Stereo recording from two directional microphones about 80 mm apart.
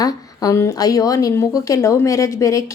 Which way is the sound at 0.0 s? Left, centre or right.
Left.